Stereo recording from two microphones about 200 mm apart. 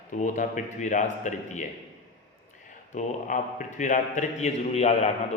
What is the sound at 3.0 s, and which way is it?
A man's voice, 40° left (ahead or behind).